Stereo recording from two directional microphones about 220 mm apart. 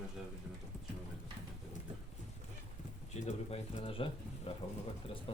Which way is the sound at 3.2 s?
30° left (ahead or behind).